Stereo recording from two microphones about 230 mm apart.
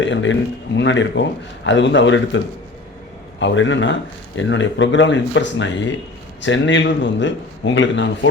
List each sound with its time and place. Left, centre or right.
0.0 s a man's voice: left
3.4 s a man's voice: left